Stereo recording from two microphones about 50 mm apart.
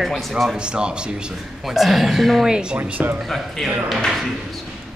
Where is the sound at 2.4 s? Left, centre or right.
Centre.